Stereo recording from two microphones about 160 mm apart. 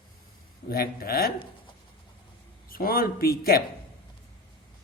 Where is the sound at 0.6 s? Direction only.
70° left (ahead or behind).